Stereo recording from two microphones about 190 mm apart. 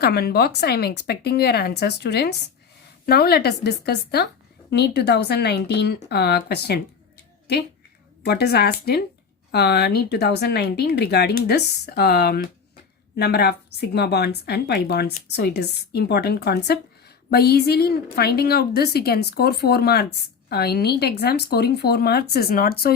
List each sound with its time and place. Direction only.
0.0 s speech: 55° left (ahead or behind)
8.2 s speech: 55° left (ahead or behind)